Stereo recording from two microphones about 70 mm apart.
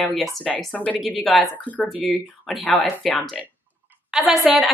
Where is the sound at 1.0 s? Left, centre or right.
Centre.